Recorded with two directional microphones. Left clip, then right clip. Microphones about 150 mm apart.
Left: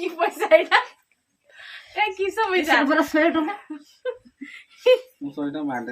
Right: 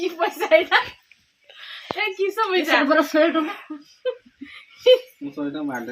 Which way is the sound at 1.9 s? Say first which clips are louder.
Even; 15° left (ahead or behind).